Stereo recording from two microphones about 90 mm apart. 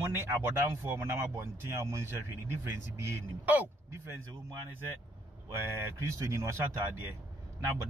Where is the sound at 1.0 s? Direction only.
30° right (ahead or behind).